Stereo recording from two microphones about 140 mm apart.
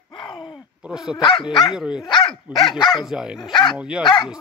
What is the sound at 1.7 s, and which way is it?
Speech, 5° right (ahead or behind).